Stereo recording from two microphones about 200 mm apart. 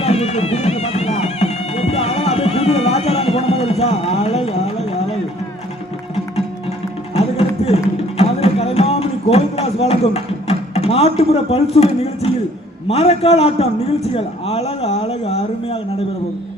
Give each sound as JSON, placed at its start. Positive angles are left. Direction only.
{"t": 0.0, "sound": "music", "side_deg": 30}
{"t": 7.1, "sound": "music", "side_deg": 30}
{"t": 8.2, "sound": "a sound", "side_deg": 30}
{"t": 12.9, "sound": "a man's voice", "side_deg": 30}